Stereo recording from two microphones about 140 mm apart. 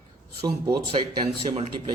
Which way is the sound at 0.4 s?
30° right (ahead or behind).